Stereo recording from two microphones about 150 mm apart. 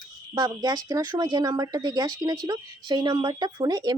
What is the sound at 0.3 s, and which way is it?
Speech, 30° right (ahead or behind).